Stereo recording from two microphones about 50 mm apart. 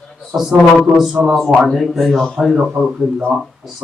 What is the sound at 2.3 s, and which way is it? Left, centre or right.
Speech, centre.